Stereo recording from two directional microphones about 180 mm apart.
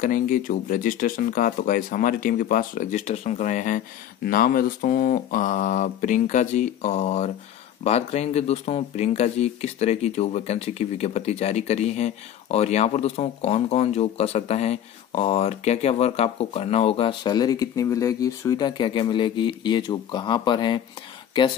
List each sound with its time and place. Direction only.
0.0 s speech: 50° left (ahead or behind); by 20.8 s 25° left (ahead or behind)